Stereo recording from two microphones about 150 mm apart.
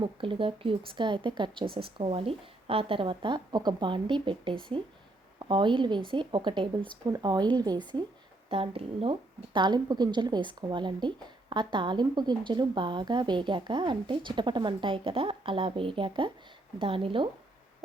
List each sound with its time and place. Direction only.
0.0 s a woman's voice: 35° right (ahead or behind)